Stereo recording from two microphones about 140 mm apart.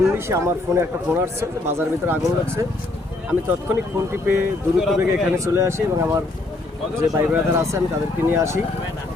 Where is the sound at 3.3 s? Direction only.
15° right (ahead or behind).